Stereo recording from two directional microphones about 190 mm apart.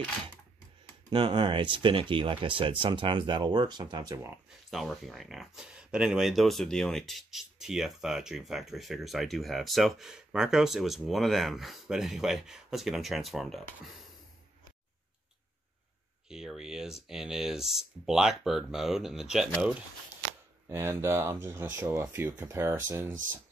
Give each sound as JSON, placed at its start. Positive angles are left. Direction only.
{"t": 1.1, "sound": "speech", "side_deg": -25}
{"t": 4.5, "sound": "speech", "side_deg": 0}
{"t": 16.3, "sound": "speech", "side_deg": -5}
{"t": 20.6, "sound": "speech", "side_deg": -15}